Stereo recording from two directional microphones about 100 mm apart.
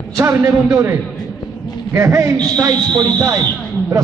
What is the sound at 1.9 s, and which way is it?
A man's voice, 30° right (ahead or behind).